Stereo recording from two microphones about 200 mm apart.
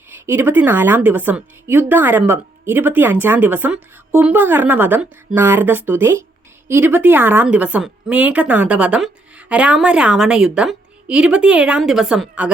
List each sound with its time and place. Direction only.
0.1 s a woman's voice: 10° right (ahead or behind)